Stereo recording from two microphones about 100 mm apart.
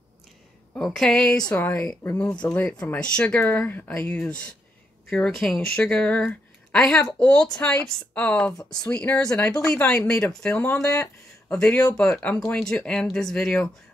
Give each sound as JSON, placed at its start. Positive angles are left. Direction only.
{"t": 0.7, "sound": "a woman's voice", "side_deg": 5}
{"t": 1.5, "sound": "a woman's voice", "side_deg": 20}
{"t": 12.4, "sound": "a woman's voice", "side_deg": 5}